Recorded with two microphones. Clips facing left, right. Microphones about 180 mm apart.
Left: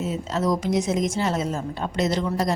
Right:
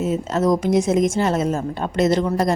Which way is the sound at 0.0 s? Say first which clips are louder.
Right 5 dB; 50° right (ahead or behind).